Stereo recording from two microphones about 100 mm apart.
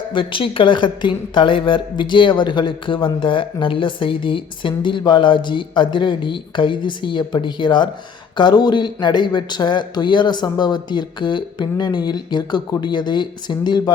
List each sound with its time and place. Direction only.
0.1 s a woman's voice: 60° left (ahead or behind)